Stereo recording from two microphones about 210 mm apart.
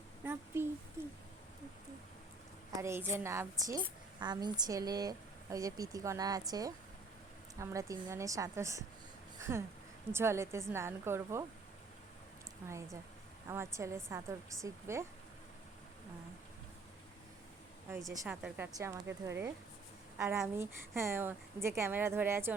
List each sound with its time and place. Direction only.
0.3 s a sound: 10° right (ahead or behind)
2.8 s a woman's voice: 10° right (ahead or behind)
12.6 s a woman's voice: 15° right (ahead or behind)
18.1 s a woman's voice: 15° right (ahead or behind)